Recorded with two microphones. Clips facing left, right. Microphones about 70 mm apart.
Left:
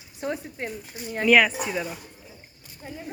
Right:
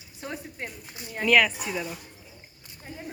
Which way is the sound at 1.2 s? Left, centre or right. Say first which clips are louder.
Left 3 dB; centre.